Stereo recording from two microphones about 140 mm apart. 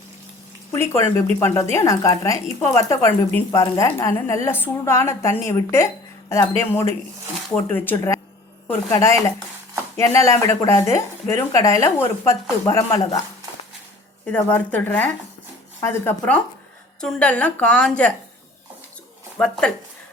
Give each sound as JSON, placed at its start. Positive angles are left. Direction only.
{"t": 0.7, "sound": "a woman's voice", "side_deg": 20}
{"t": 14.3, "sound": "a woman's voice", "side_deg": 10}
{"t": 17.0, "sound": "a woman's voice", "side_deg": 5}
{"t": 19.4, "sound": "speech", "side_deg": 5}